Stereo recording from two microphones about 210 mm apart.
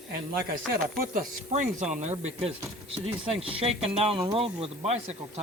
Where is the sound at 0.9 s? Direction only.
40° right (ahead or behind).